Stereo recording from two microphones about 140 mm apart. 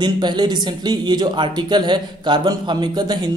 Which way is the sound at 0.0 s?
30° right (ahead or behind).